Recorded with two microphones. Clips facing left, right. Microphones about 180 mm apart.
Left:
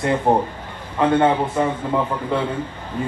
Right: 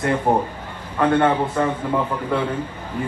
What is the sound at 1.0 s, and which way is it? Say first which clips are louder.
A man's voice: left 1 dB; 10° left (ahead or behind).